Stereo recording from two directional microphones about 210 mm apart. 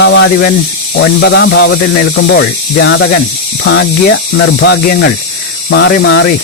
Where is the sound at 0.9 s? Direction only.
55° left (ahead or behind).